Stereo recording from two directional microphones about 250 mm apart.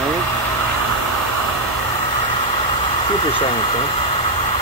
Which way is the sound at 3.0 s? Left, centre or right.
Centre.